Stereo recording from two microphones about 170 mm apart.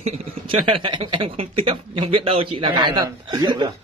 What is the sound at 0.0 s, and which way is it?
Speech, 35° right (ahead or behind).